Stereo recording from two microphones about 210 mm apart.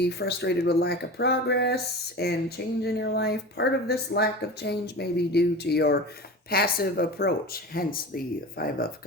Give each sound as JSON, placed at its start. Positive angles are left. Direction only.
{"t": 0.0, "sound": "speech", "side_deg": 50}